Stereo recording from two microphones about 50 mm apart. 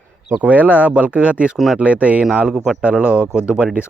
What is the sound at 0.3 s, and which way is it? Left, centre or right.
Speech, right.